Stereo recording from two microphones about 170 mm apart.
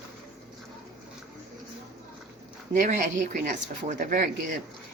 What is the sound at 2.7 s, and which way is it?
Speech, 50° right (ahead or behind).